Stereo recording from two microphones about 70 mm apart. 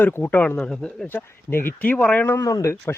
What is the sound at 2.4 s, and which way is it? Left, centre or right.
Speech, left.